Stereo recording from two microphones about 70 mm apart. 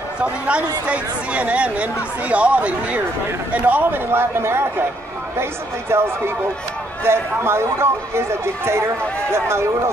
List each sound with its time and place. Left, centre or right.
0.2 s speech: centre; by 9.7 s right